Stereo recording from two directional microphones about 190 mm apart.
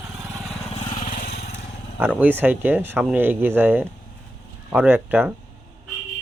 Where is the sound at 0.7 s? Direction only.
35° left (ahead or behind).